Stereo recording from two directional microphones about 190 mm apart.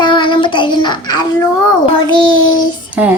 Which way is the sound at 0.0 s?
25° left (ahead or behind).